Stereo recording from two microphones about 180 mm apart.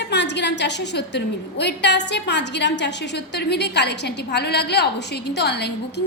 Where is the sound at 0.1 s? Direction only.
75° left (ahead or behind).